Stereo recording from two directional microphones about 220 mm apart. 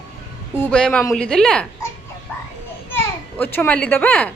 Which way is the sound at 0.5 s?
5° left (ahead or behind).